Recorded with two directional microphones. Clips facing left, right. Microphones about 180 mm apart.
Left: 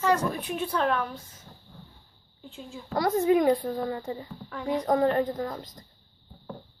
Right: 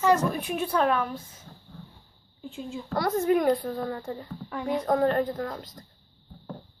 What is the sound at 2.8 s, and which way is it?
A woman's voice, 15° left (ahead or behind).